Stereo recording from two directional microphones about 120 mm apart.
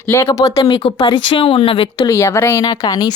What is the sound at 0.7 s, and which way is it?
Speech, 50° left (ahead or behind).